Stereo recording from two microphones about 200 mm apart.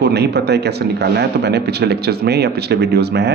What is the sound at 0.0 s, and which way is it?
Speech, 55° right (ahead or behind).